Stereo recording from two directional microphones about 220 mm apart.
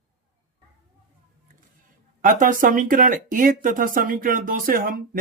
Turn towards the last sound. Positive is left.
turn(degrees=-40)  # may be behind; listen again after turning